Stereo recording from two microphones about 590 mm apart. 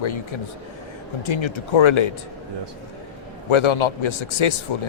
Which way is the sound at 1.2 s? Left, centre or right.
Left.